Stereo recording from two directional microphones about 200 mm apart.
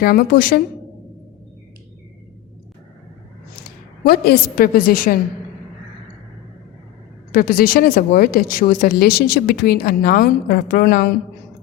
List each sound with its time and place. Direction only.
0.0 s speech: 50° left (ahead or behind)
4.0 s speech: 50° left (ahead or behind)
7.3 s speech: 45° left (ahead or behind)